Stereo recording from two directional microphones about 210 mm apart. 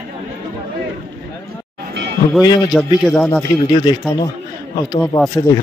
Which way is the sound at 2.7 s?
Centre (ahead or behind).